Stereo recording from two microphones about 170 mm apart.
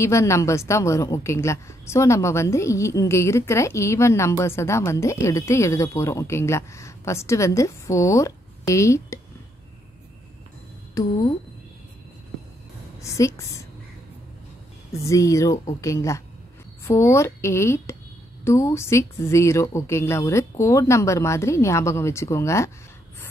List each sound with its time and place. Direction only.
0.0 s a woman's voice: 15° left (ahead or behind)
11.0 s a woman's voice: 20° left (ahead or behind)
13.0 s a woman's voice: 15° left (ahead or behind)
14.9 s a woman's voice: 20° left (ahead or behind)